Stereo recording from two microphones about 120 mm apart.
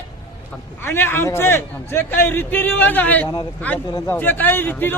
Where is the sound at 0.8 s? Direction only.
20° left (ahead or behind).